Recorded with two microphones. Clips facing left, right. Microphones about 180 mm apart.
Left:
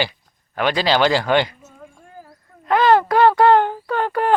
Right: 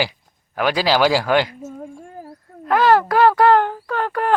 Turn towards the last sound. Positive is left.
turn(degrees=0)  # may be behind; listen again after turning